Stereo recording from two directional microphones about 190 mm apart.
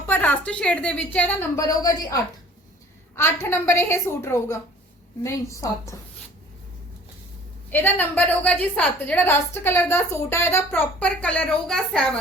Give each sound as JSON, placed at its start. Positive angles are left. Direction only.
{"t": 0.1, "sound": "a woman's voice", "side_deg": 10}
{"t": 7.7, "sound": "a woman's voice", "side_deg": 10}